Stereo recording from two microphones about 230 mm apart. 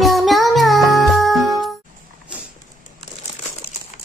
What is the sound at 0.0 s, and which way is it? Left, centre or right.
Music, centre.